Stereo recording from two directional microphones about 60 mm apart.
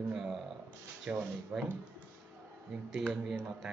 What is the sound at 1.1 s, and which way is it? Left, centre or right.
Speech, right.